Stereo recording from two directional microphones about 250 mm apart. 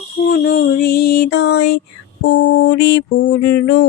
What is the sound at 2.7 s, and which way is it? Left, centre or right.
Music, left.